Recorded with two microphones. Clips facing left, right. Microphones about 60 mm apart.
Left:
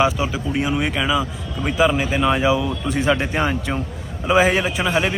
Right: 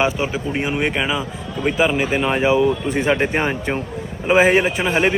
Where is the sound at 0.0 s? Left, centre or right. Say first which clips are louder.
Even; right.